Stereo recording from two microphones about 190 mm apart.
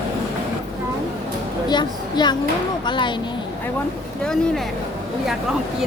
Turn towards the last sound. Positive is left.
turn(degrees=5)  # may be behind; listen again after turning